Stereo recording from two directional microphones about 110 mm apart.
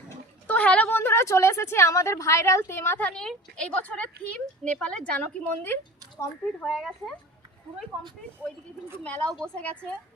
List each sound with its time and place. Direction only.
0.4 s a woman's voice: 15° left (ahead or behind)
3.1 s speech: 5° left (ahead or behind)
6.6 s speech: 5° left (ahead or behind)
9.3 s speech: 10° left (ahead or behind)